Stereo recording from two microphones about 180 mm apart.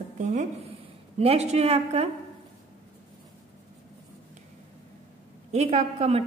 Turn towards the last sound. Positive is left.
turn(degrees=-35)  # may be behind; listen again after turning